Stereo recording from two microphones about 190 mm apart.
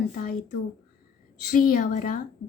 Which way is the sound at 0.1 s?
50° left (ahead or behind).